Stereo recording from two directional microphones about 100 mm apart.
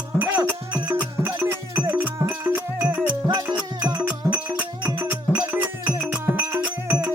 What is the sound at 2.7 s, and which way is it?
Music, 15° right (ahead or behind).